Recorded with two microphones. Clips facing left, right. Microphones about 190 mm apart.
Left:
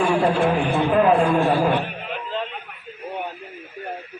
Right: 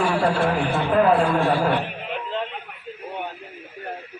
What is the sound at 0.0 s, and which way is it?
A man's voice, 15° left (ahead or behind).